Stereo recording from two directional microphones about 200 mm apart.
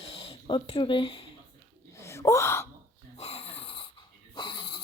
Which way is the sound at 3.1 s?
30° left (ahead or behind).